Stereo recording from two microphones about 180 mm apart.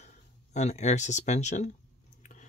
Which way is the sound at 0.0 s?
40° left (ahead or behind).